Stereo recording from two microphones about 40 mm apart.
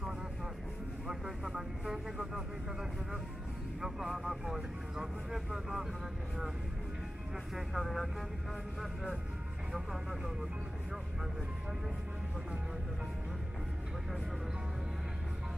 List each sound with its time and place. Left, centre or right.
1.5 s speech: centre
7.5 s speech: centre
9.7 s speech: centre